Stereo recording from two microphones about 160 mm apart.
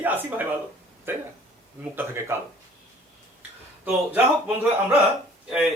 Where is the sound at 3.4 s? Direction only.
10° right (ahead or behind).